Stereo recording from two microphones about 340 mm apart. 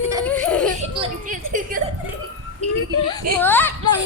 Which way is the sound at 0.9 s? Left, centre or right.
Right.